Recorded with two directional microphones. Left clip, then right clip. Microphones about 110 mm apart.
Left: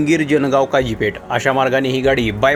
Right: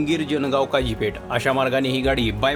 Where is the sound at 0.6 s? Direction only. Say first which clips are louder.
Left 5 dB; 20° left (ahead or behind).